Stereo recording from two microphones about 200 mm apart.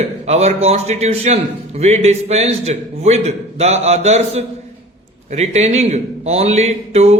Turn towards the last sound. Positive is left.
turn(degrees=-30)  # may be behind; listen again after turning